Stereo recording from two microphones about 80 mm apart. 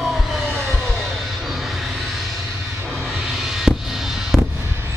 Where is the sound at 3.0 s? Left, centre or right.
Centre.